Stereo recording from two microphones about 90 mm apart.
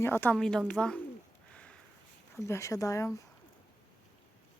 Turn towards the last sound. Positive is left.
turn(degrees=35)  # may be behind; listen again after turning